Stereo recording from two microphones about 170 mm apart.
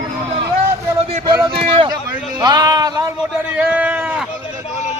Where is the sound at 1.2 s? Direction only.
25° right (ahead or behind).